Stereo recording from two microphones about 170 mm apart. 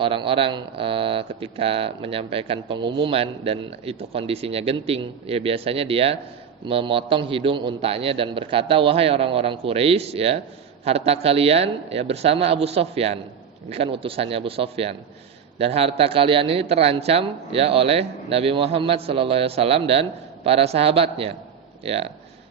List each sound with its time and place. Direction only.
0.0 s speech: 30° right (ahead or behind)